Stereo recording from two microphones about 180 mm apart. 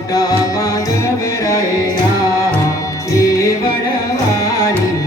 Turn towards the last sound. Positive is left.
turn(degrees=20)  # may be behind; listen again after turning